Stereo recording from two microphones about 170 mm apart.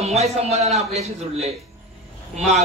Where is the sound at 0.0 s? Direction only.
40° right (ahead or behind).